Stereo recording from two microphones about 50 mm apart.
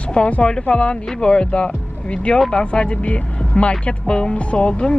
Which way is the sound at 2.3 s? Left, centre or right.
Centre.